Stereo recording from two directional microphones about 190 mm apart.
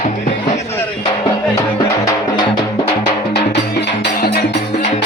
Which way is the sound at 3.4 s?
60° left (ahead or behind).